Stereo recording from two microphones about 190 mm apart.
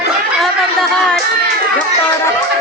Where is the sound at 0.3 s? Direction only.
Centre (ahead or behind).